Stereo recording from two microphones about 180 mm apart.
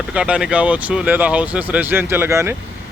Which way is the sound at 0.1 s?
5° right (ahead or behind).